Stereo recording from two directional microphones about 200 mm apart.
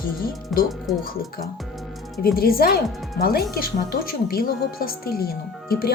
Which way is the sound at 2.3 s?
50° left (ahead or behind).